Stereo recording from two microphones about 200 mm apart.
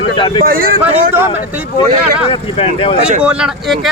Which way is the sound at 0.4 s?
45° right (ahead or behind).